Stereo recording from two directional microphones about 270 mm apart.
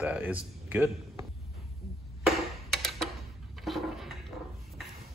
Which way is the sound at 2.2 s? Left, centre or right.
Centre.